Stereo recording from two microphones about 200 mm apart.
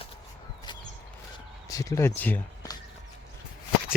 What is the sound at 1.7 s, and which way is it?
Speech, 15° left (ahead or behind).